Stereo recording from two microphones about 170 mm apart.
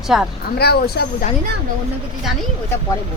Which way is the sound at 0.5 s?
70° left (ahead or behind).